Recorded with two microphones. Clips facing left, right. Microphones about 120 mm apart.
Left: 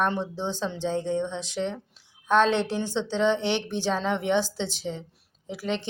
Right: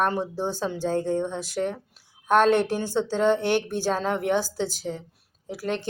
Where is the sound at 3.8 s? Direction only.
10° right (ahead or behind).